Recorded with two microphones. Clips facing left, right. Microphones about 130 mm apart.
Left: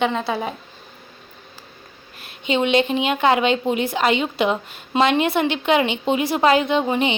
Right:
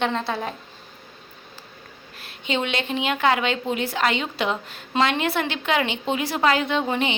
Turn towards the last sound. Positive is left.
turn(degrees=20)  # may be behind; listen again after turning